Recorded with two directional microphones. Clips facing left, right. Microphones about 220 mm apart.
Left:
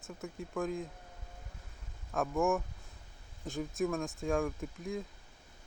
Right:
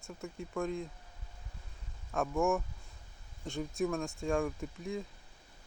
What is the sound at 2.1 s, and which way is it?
Speech, centre (ahead or behind).